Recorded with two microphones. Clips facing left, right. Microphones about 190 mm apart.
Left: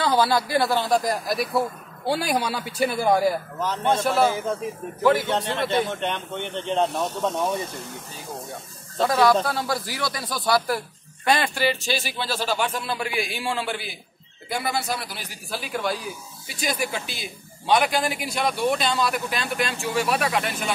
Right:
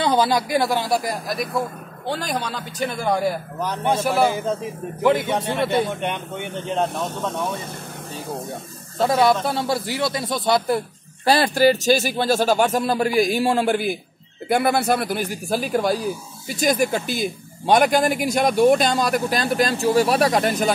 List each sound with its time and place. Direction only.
0.0 s speech: 20° right (ahead or behind)
1.2 s a man's voice: centre (ahead or behind)
3.5 s speech: 15° right (ahead or behind)
9.0 s speech: 25° right (ahead or behind)
11.2 s speech: 35° right (ahead or behind)